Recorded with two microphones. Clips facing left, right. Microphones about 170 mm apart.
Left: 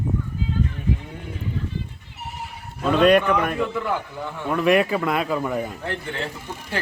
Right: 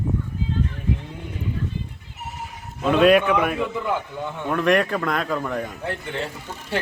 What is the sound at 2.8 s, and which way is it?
Speech, centre (ahead or behind).